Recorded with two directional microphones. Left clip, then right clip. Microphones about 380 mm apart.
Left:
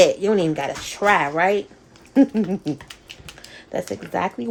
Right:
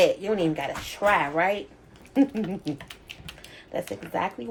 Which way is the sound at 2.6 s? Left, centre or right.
Centre.